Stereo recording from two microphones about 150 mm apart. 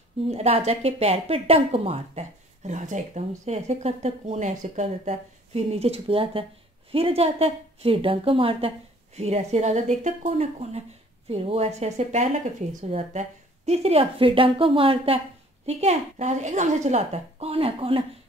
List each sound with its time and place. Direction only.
0.3 s speech: 45° right (ahead or behind)